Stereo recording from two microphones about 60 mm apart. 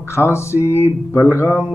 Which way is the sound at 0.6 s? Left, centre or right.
Left.